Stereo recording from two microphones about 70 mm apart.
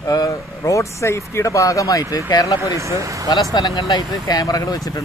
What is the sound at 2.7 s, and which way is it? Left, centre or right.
Speech, right.